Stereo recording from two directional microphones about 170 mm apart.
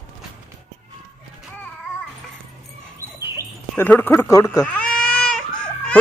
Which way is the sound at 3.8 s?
10° left (ahead or behind).